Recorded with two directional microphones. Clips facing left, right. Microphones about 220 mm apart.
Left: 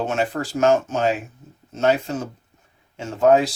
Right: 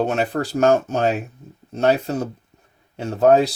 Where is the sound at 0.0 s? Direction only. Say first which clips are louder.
Right 2 dB; 35° right (ahead or behind).